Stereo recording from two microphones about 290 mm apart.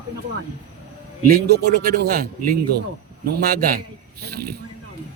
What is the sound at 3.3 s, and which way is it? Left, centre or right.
Speech, right.